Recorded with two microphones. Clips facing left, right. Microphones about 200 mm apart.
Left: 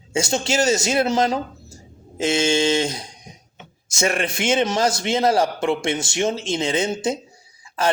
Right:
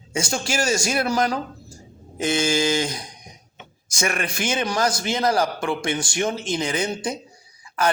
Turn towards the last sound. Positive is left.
turn(degrees=25)  # may be behind; listen again after turning